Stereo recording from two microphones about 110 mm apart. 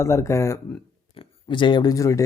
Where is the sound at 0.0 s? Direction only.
25° left (ahead or behind).